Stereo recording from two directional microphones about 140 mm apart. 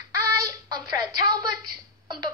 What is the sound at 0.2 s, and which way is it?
Child singing, 25° right (ahead or behind).